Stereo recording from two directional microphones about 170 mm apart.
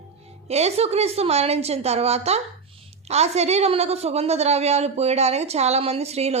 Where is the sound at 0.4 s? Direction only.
40° right (ahead or behind).